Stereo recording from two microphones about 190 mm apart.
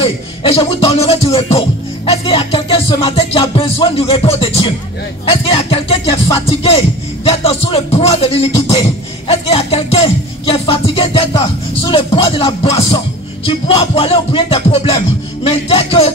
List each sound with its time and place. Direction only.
0.0 s music: 30° left (ahead or behind)